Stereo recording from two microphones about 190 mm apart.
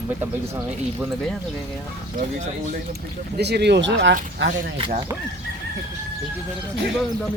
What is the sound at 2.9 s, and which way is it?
Speech, 60° right (ahead or behind).